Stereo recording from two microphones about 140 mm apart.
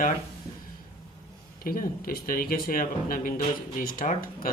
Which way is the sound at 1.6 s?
90° left.